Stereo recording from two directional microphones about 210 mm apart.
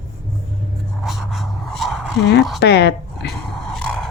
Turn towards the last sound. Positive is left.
turn(degrees=5)  # may be behind; listen again after turning